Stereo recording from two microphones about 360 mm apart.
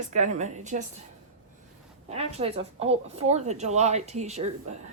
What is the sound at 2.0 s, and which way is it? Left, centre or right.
Speech, centre.